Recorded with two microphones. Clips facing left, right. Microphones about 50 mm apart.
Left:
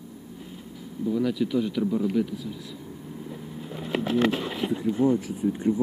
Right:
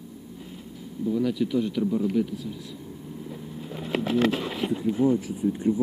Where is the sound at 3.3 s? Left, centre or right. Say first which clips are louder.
Even; centre.